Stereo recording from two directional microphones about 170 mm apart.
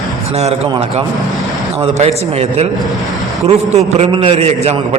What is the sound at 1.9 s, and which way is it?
A man's voice, 40° right (ahead or behind).